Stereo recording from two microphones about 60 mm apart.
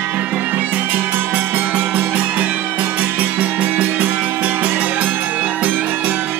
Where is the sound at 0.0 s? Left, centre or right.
Right.